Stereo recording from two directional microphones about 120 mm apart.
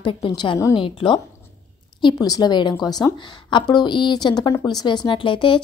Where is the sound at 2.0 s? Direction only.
35° left (ahead or behind).